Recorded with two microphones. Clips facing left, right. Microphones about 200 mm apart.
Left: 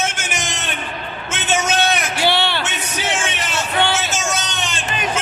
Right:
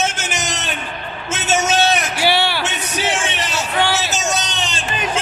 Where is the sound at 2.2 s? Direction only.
10° right (ahead or behind).